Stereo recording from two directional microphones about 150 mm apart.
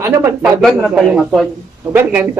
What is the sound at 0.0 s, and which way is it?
Speech, 20° right (ahead or behind).